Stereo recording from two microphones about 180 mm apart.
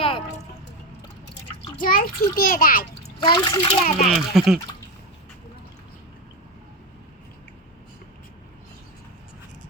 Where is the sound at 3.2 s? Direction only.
25° left (ahead or behind).